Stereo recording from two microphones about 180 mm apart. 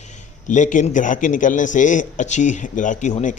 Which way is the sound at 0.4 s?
45° left (ahead or behind).